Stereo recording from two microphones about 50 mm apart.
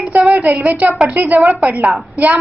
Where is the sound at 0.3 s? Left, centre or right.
Right.